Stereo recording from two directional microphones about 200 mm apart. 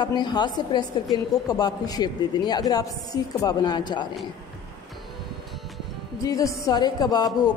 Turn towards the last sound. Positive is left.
turn(degrees=20)  # may be behind; listen again after turning